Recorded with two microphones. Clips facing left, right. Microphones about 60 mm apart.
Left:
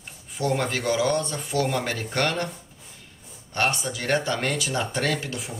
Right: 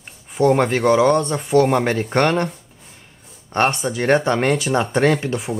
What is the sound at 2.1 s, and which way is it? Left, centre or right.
Speech, right.